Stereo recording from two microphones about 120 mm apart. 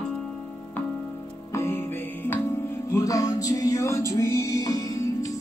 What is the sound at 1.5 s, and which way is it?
Music, 20° left (ahead or behind).